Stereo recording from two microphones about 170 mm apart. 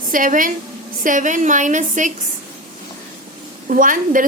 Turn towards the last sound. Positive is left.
turn(degrees=-50)  # may be behind; listen again after turning